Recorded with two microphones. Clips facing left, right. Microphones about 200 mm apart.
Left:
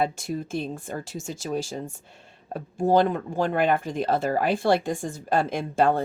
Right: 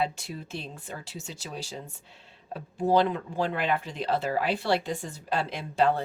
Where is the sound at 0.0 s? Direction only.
45° left (ahead or behind).